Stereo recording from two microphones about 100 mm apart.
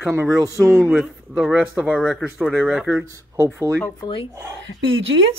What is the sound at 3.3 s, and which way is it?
Speech, 25° right (ahead or behind).